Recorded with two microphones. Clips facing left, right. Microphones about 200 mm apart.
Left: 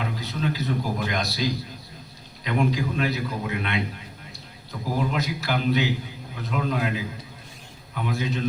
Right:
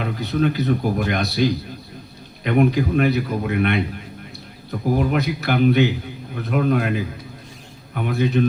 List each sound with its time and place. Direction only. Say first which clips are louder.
0.0 s speech: right 7 dB; 60° right (ahead or behind)